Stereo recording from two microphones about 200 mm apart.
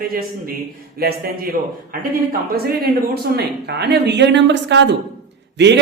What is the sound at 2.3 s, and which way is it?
A woman's voice, 50° right (ahead or behind).